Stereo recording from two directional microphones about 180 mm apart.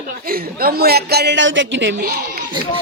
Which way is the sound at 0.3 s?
55° right (ahead or behind).